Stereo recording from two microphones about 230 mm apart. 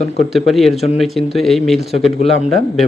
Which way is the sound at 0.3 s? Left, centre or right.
Centre.